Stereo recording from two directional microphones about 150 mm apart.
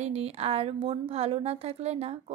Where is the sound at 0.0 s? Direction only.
45° right (ahead or behind).